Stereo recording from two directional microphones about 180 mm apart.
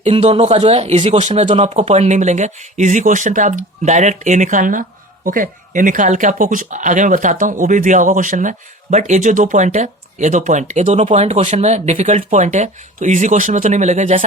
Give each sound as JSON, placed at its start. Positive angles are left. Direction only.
{"t": 0.0, "sound": "speech", "side_deg": -35}